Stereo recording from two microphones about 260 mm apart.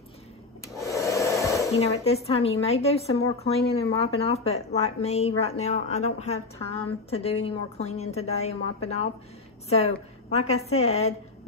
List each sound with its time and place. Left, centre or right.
0.7 s filing: centre
1.8 s a woman's voice: left